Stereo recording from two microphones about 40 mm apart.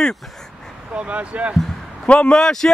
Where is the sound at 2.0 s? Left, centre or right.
Left.